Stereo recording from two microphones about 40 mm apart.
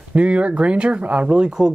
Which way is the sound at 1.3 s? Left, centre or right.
Right.